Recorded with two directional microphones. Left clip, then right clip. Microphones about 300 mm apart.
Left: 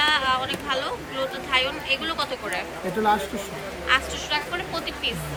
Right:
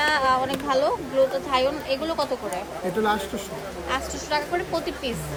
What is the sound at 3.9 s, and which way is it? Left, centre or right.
Speech, centre.